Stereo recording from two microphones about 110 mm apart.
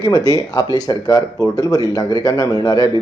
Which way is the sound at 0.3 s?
35° left (ahead or behind).